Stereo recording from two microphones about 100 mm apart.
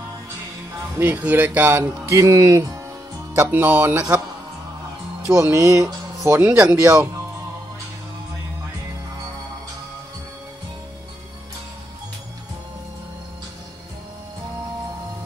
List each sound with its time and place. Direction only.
0.9 s speech: 15° right (ahead or behind); by 2.8 s 35° right (ahead or behind)
3.3 s speech: 20° right (ahead or behind)
5.3 s speech: 30° right (ahead or behind); by 6.8 s 15° right (ahead or behind)